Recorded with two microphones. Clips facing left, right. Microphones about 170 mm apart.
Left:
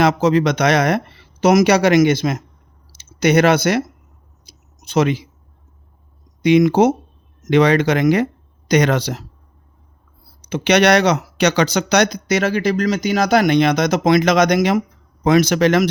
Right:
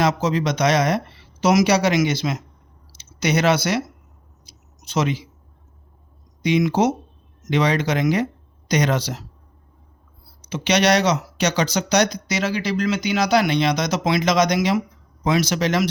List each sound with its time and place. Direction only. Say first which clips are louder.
0.0 s speech: left 6 dB; 65° left (ahead or behind)
4.4 s a sound: left 3 dB; 55° left (ahead or behind)
6.4 s speech: left 6 dB; 55° left (ahead or behind)
10.5 s speech: left 4 dB; 60° left (ahead or behind)